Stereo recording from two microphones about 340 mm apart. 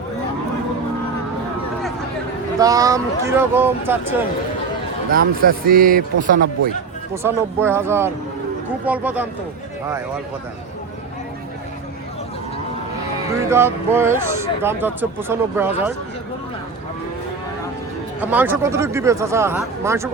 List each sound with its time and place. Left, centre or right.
2.6 s speech: centre
5.1 s speech: right
7.1 s speech: centre
13.5 s speech: centre
18.2 s speech: centre